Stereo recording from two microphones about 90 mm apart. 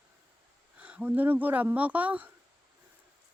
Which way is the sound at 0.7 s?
15° right (ahead or behind).